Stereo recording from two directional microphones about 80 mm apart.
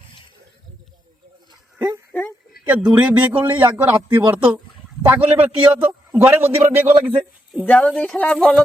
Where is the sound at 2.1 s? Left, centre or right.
Left.